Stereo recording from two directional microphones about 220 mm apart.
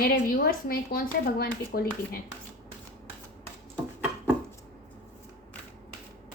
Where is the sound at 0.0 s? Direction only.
40° left (ahead or behind).